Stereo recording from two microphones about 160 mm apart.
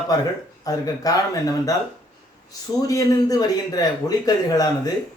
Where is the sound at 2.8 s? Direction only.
25° left (ahead or behind).